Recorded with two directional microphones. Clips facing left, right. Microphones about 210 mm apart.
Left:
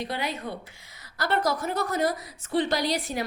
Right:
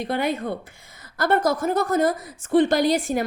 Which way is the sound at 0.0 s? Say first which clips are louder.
Right 7 dB; 55° right (ahead or behind).